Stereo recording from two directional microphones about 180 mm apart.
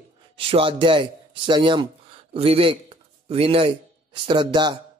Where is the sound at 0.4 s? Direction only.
30° right (ahead or behind).